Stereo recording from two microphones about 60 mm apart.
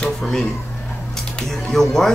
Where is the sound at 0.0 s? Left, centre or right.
Centre.